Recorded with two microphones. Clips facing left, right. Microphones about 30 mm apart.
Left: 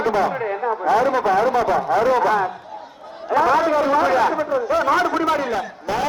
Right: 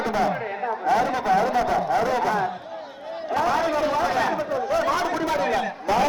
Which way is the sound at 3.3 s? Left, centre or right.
Left.